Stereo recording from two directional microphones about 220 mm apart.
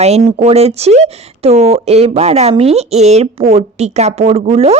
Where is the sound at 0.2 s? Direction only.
25° right (ahead or behind).